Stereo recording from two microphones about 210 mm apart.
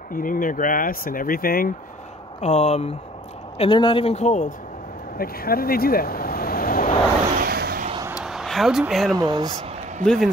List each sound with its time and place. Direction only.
0.1 s speech: 40° left (ahead or behind)
2.4 s a man's voice: 30° left (ahead or behind)
5.1 s speech: 45° left (ahead or behind)
7.3 s a sound: 45° right (ahead or behind)
8.2 s a sound: centre (ahead or behind)
9.1 s speech: 20° right (ahead or behind)
10.0 s a man's voice: centre (ahead or behind)